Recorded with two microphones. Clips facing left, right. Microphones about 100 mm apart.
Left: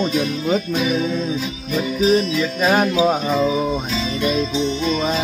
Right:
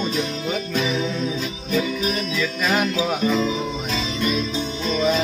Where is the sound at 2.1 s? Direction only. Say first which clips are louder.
Left 7 dB; 30° left (ahead or behind).